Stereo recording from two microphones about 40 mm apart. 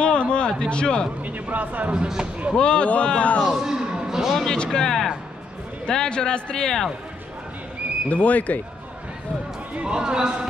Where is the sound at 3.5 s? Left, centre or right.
Centre.